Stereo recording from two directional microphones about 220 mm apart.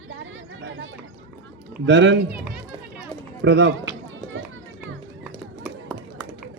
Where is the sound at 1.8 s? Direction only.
55° right (ahead or behind).